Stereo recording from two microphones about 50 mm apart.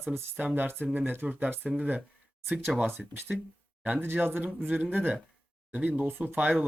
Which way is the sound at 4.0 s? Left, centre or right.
Right.